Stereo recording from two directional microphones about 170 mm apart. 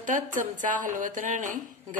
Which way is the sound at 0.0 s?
50° right (ahead or behind).